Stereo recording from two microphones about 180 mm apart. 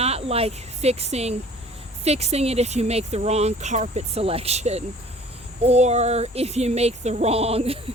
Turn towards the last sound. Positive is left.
turn(degrees=-35)  # may be behind; listen again after turning